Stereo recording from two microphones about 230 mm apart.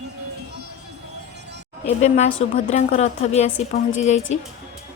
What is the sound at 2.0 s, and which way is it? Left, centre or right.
A woman's voice, left.